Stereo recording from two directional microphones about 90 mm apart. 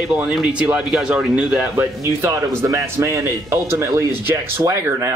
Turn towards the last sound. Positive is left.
turn(degrees=-30)  # may be behind; listen again after turning